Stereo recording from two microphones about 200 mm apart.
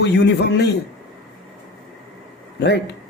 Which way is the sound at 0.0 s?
55° left (ahead or behind).